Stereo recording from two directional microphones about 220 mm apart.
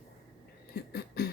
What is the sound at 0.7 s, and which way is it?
Beatboxing, 45° left (ahead or behind).